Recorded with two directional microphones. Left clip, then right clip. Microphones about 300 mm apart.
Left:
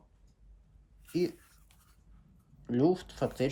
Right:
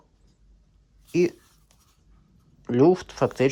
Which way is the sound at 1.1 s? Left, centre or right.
Centre.